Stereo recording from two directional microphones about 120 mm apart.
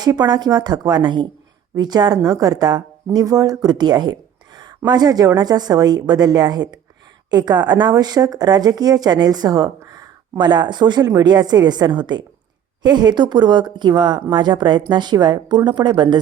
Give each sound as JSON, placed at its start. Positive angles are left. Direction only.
{"t": 0.0, "sound": "speech", "side_deg": -35}